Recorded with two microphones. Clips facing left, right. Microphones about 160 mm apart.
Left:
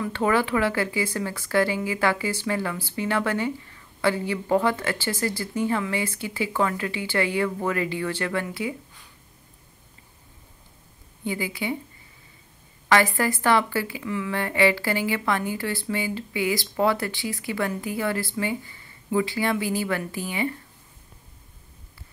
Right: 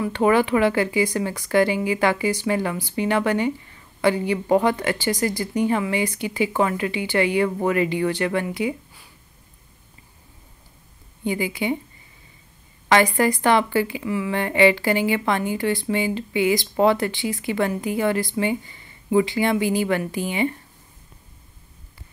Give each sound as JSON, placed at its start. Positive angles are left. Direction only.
{"t": 0.0, "sound": "speech", "side_deg": -15}
{"t": 11.2, "sound": "a woman's voice", "side_deg": -20}
{"t": 12.8, "sound": "a woman's voice", "side_deg": -20}